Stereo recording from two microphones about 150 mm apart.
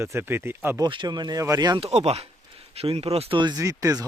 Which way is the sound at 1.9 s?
45° right (ahead or behind).